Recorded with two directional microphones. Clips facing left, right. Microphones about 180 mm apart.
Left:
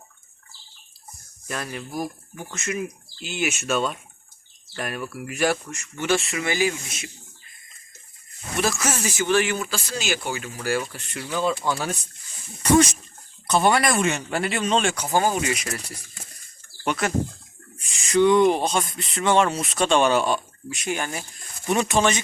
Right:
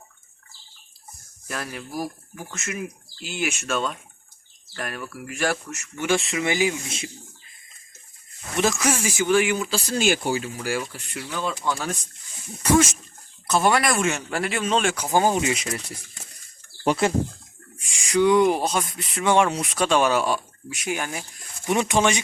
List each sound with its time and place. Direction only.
1.5 s speech: centre (ahead or behind)
5.7 s speech: 10° right (ahead or behind); by 7.1 s 25° right (ahead or behind)
8.6 s speech: 15° right (ahead or behind)
9.9 s speech: 50° right (ahead or behind)
10.6 s speech: 15° right (ahead or behind)
11.3 s speech: 5° left (ahead or behind)
13.5 s speech: centre (ahead or behind)
15.0 s speech: 15° right (ahead or behind)
16.8 s speech: 35° right (ahead or behind)
17.7 s speech: 10° right (ahead or behind)